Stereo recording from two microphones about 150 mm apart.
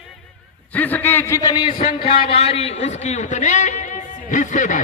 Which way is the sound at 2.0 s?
40° left (ahead or behind).